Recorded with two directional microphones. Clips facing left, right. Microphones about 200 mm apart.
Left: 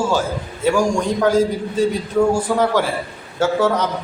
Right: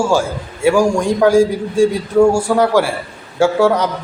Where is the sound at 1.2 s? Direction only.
10° right (ahead or behind).